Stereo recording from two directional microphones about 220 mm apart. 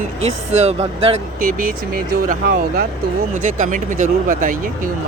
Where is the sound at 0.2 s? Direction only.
30° right (ahead or behind).